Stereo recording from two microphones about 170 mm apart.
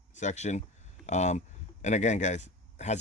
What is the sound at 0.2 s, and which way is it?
Speech, 40° left (ahead or behind).